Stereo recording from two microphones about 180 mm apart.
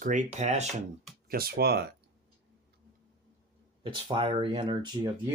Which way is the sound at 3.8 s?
25° right (ahead or behind).